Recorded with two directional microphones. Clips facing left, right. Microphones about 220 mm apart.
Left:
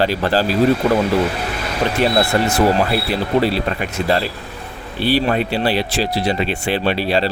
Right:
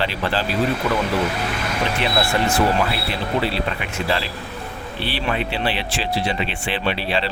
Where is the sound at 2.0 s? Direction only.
40° left (ahead or behind).